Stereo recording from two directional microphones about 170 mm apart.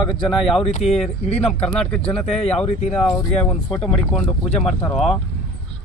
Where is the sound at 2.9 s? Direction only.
5° left (ahead or behind).